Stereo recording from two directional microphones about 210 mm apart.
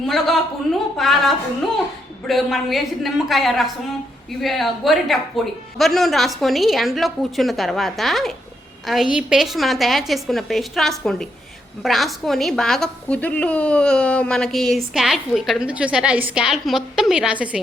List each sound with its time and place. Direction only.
0.0 s a woman's voice: centre (ahead or behind)